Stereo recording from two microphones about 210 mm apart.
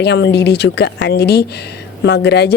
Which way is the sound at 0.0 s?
55° left (ahead or behind).